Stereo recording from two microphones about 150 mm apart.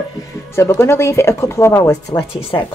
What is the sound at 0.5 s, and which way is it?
Speech, 20° left (ahead or behind).